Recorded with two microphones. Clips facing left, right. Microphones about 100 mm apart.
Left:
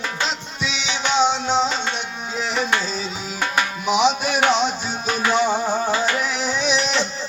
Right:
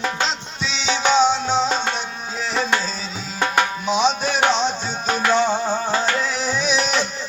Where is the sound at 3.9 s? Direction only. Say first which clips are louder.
Left 1 dB; 10° left (ahead or behind); by 7.1 s 25° left (ahead or behind).